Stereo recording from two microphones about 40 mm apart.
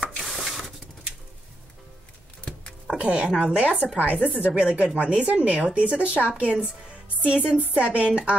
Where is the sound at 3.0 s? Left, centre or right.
Right.